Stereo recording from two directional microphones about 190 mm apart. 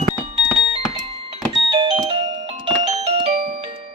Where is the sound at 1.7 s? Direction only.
25° right (ahead or behind).